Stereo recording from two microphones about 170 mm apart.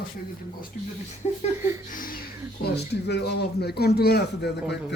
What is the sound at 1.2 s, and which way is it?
Speech, 35° left (ahead or behind).